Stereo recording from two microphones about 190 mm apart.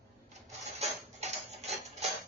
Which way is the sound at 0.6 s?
35° right (ahead or behind).